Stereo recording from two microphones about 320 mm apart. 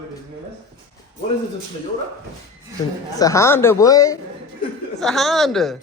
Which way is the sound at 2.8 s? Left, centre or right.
Centre.